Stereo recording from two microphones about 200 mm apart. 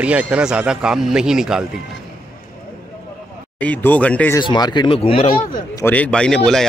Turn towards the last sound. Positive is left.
turn(degrees=0)  # may be behind; listen again after turning